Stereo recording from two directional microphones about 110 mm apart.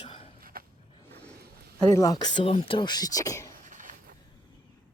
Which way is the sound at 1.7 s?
35° left (ahead or behind).